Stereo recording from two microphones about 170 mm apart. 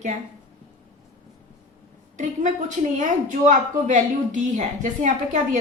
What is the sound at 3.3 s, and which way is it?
A woman's voice, 50° right (ahead or behind).